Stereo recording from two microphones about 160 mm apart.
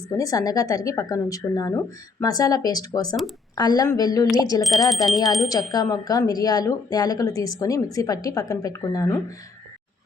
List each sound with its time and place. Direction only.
0.2 s speech: 20° left (ahead or behind)
4.9 s speech: centre (ahead or behind)
5.1 s speech: 20° left (ahead or behind)